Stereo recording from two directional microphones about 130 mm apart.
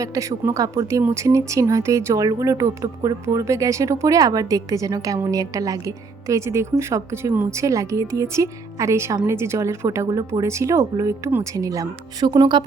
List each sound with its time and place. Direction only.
0.0 s speech: 25° right (ahead or behind)